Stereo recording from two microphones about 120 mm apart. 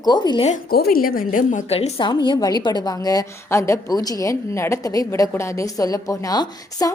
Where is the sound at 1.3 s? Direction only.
90° left.